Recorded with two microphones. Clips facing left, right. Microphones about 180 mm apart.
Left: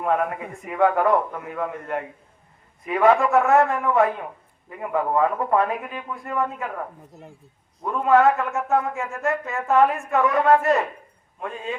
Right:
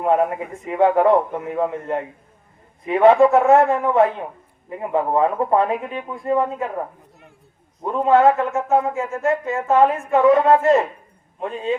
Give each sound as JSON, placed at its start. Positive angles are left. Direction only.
{"t": 0.0, "sound": "a man's voice", "side_deg": -25}
{"t": 7.9, "sound": "a man's voice", "side_deg": -25}